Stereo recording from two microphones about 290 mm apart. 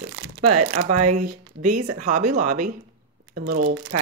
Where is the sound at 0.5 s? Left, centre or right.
Right.